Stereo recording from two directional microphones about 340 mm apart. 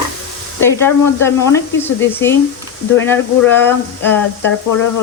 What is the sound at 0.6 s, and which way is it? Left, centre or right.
Speech, centre.